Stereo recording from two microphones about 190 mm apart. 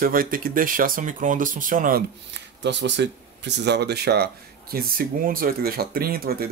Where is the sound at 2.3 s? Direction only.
65° right (ahead or behind).